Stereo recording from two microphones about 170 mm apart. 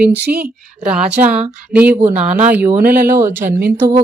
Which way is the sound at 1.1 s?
10° right (ahead or behind).